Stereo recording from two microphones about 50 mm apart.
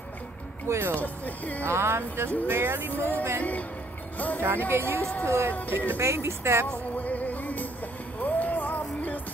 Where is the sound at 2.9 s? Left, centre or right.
Left.